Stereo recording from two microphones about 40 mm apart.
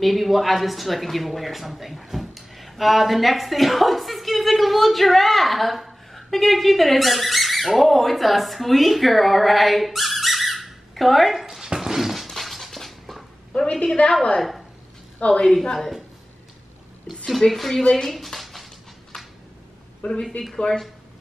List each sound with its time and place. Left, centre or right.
0.0 s speech: centre
11.6 s dog: centre
13.5 s a woman's voice: left
15.4 s speech: centre
17.4 s a woman's voice: centre
17.9 s a sound: centre
19.1 s a sound: centre
20.0 s speech: left
20.5 s speech: centre